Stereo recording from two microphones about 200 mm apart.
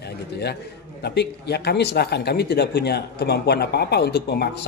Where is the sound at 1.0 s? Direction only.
55° left (ahead or behind).